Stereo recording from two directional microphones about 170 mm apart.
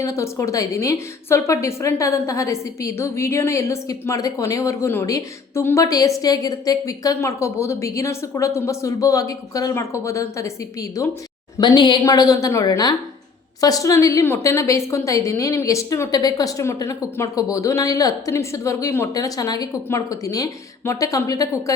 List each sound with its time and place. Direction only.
0.0 s a woman's voice: 15° left (ahead or behind)